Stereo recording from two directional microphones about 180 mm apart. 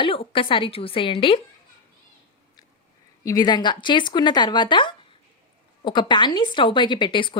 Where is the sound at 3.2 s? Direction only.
20° left (ahead or behind).